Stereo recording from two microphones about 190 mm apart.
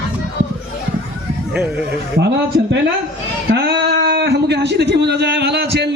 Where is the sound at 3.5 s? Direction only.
55° right (ahead or behind).